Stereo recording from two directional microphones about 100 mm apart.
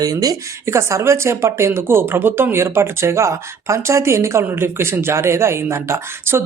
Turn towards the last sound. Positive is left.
turn(degrees=-25)  # may be behind; listen again after turning